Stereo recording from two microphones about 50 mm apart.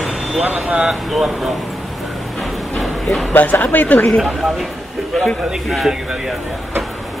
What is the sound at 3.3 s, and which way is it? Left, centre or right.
Speech, left.